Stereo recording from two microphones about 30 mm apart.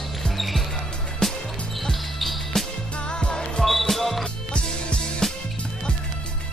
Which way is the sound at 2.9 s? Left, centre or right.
Left.